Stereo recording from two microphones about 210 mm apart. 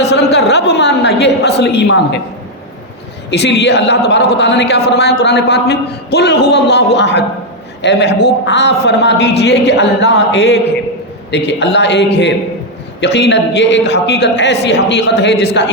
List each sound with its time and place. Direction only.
0.0 s a woman's voice: 55° left (ahead or behind)
3.2 s a woman's voice: 55° left (ahead or behind)